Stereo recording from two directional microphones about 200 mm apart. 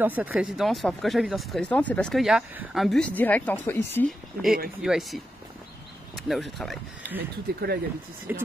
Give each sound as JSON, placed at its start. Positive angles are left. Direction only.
{"t": 0.0, "sound": "speech", "side_deg": -10}
{"t": 4.8, "sound": "speech", "side_deg": 0}
{"t": 7.2, "sound": "speech", "side_deg": -50}
{"t": 8.3, "sound": "speech", "side_deg": -10}